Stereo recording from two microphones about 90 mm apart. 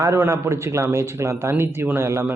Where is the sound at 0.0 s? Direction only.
30° right (ahead or behind).